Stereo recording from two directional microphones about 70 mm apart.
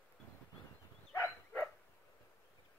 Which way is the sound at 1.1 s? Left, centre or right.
Left.